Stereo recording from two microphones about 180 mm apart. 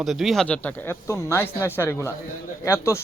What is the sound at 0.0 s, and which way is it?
Speech, centre (ahead or behind).